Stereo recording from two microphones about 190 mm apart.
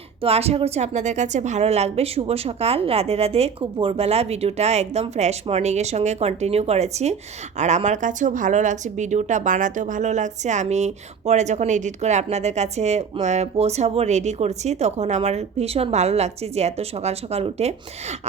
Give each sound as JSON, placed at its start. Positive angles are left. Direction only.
{"t": 0.2, "sound": "a woman's voice", "side_deg": -30}